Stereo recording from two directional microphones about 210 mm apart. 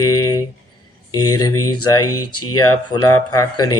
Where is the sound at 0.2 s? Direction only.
15° left (ahead or behind).